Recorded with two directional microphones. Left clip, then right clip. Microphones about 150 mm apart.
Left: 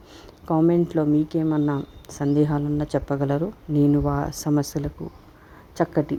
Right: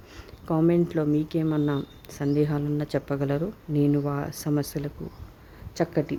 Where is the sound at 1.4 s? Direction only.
5° right (ahead or behind).